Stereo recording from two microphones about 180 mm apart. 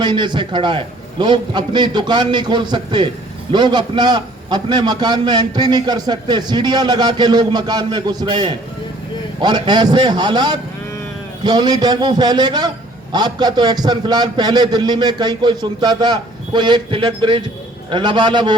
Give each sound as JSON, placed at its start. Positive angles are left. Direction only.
{"t": 0.0, "sound": "a man's voice", "side_deg": -25}